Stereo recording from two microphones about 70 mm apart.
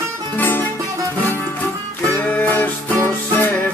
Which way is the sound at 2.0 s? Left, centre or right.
Left.